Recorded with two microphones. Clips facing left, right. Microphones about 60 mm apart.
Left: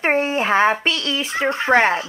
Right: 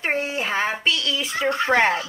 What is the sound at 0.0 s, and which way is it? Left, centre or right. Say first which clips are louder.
A child's voice: left 6 dB; left.